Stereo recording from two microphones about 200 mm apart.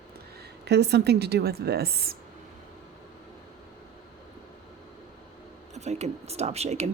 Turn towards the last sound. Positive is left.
turn(degrees=-35)  # may be behind; listen again after turning